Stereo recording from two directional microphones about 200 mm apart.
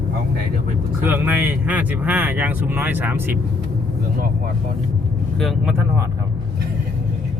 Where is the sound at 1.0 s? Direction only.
10° right (ahead or behind).